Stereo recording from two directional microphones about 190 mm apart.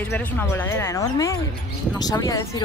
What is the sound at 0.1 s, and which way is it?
Speech, 10° left (ahead or behind).